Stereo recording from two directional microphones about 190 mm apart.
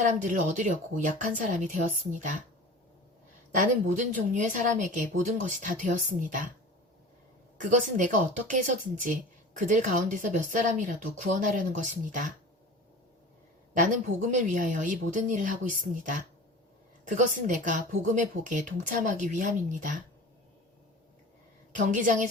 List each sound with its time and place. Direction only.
0.0 s a woman's voice: 40° right (ahead or behind)
3.6 s speech: 40° right (ahead or behind)
7.6 s a woman's voice: 40° right (ahead or behind)
13.7 s speech: 40° right (ahead or behind)
17.2 s a woman's voice: 40° right (ahead or behind)
21.8 s speech: 45° right (ahead or behind)